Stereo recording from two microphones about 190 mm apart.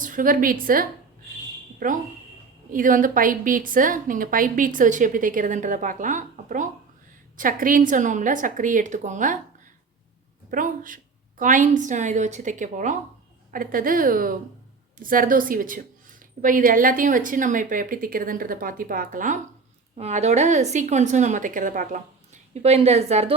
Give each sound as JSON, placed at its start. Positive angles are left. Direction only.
{"t": 0.0, "sound": "a woman's voice", "side_deg": -45}
{"t": 2.7, "sound": "a woman's voice", "side_deg": -45}
{"t": 10.5, "sound": "a woman's voice", "side_deg": -45}
{"t": 22.6, "sound": "a woman's voice", "side_deg": -35}